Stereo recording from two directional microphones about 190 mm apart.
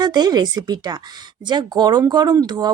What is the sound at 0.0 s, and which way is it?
Speech, 20° right (ahead or behind).